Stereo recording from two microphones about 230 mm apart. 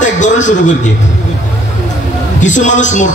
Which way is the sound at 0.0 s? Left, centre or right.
Left.